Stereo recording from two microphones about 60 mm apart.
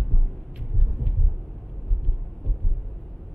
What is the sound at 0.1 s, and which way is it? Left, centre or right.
Heart sounds, centre.